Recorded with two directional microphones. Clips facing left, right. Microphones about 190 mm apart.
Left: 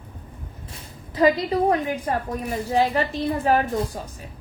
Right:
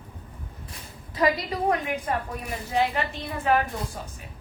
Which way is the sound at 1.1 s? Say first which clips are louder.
Left 6 dB; 30° left (ahead or behind).